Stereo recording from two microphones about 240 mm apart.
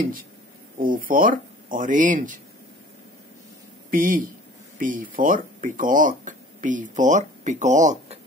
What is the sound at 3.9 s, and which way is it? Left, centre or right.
Speech, right.